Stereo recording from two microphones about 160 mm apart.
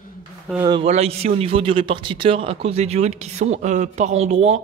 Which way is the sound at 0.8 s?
40° right (ahead or behind).